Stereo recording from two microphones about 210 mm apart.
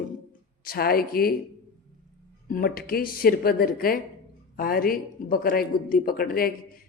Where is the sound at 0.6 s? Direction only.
45° left (ahead or behind).